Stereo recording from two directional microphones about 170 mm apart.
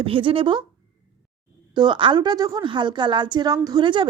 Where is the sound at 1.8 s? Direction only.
30° right (ahead or behind).